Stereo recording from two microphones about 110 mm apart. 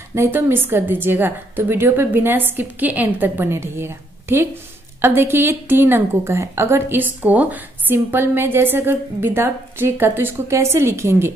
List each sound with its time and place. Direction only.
0.1 s a woman's voice: 20° right (ahead or behind)